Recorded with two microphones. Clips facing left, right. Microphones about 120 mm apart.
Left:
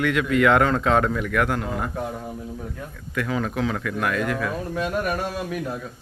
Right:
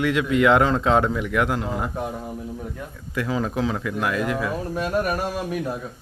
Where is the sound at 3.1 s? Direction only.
25° right (ahead or behind).